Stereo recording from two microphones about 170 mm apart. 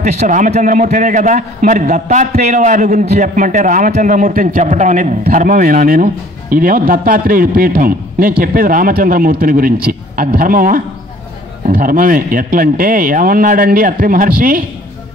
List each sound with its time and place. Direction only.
0.0 s a man's voice: 45° right (ahead or behind)